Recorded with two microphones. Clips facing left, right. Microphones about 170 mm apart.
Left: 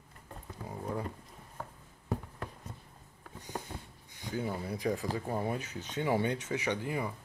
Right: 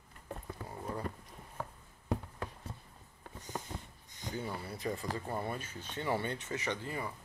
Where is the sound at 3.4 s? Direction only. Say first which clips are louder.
Left 1 dB; 10° left (ahead or behind).